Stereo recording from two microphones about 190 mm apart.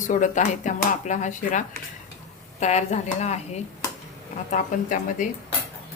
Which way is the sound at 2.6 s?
35° left (ahead or behind).